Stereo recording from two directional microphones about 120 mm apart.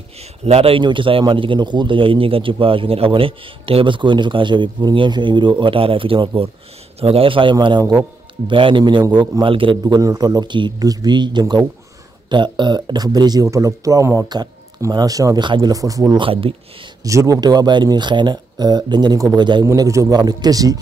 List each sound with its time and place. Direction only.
0.2 s a man's voice: 60° right (ahead or behind); by 16.2 s 30° right (ahead or behind)
16.2 s a man's voice: 50° right (ahead or behind)
17.0 s speech: 30° right (ahead or behind)
19.6 s speech: 25° right (ahead or behind)